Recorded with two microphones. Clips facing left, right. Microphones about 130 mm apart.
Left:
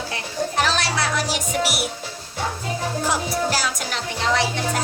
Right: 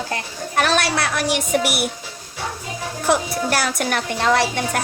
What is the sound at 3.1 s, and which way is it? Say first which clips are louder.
Music: right 5 dB; 60° right (ahead or behind).